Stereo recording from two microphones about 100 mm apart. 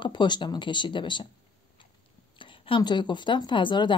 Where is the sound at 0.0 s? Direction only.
50° left (ahead or behind).